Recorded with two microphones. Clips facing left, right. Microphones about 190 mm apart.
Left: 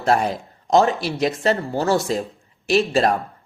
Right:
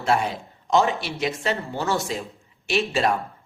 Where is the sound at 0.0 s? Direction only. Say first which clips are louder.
Left 3 dB; 40° left (ahead or behind).